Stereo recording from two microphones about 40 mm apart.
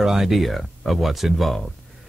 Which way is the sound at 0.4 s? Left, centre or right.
Centre.